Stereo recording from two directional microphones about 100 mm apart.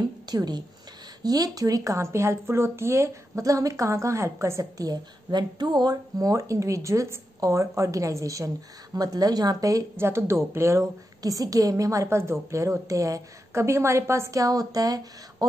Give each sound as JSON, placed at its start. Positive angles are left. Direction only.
{"t": 0.3, "sound": "speech", "side_deg": -45}
{"t": 9.9, "sound": "speech", "side_deg": -25}